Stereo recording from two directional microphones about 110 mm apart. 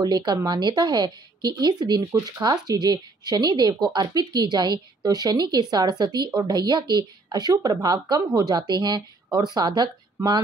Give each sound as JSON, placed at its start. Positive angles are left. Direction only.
{"t": 0.0, "sound": "speech", "side_deg": -40}
{"t": 10.2, "sound": "speech", "side_deg": -25}